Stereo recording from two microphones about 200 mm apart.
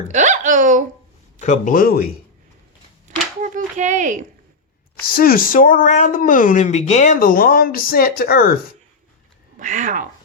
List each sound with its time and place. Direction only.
0.1 s speech: 35° right (ahead or behind)
1.4 s speech: 40° left (ahead or behind)
3.4 s speech: 35° right (ahead or behind)
5.1 s speech: 45° left (ahead or behind)
9.6 s speech: 40° right (ahead or behind)